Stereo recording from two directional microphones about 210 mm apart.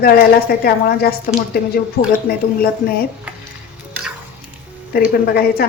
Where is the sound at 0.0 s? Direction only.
45° left (ahead or behind).